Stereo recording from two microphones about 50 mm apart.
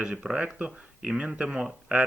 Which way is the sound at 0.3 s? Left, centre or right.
Centre.